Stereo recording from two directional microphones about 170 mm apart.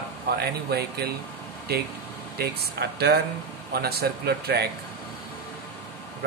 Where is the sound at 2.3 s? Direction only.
70° right (ahead or behind).